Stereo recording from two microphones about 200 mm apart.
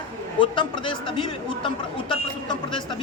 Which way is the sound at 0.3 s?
25° left (ahead or behind).